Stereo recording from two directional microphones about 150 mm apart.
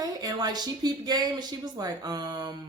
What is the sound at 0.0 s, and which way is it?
Speech, 25° right (ahead or behind).